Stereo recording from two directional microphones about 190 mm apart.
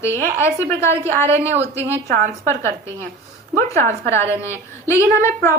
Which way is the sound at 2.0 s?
50° right (ahead or behind).